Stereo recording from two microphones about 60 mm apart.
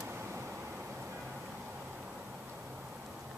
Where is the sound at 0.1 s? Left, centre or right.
Right.